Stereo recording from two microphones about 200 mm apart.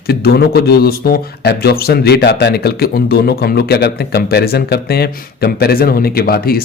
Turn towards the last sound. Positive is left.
turn(degrees=50)  # may be behind; listen again after turning